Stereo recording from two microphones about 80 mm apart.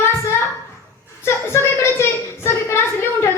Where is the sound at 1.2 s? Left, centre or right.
Left.